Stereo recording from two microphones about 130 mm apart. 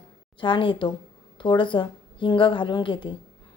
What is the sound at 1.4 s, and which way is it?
A woman's voice, 40° left (ahead or behind).